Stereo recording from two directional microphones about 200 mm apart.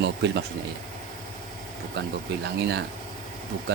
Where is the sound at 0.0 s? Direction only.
60° right (ahead or behind).